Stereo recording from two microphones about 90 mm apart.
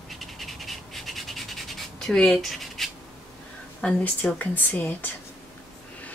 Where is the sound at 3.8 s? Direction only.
15° left (ahead or behind).